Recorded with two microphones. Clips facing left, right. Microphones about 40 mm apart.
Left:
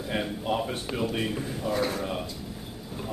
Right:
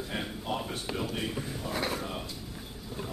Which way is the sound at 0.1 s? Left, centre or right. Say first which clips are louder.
Left 7 dB; centre.